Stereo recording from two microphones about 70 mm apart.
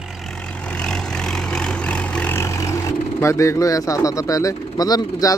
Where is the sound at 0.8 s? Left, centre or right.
Centre.